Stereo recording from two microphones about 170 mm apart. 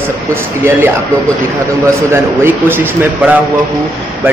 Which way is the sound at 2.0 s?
15° right (ahead or behind).